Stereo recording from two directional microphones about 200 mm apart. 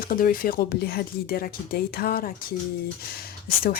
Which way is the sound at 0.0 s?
45° left (ahead or behind).